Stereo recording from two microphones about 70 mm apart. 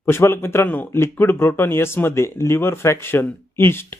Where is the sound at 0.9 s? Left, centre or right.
Left.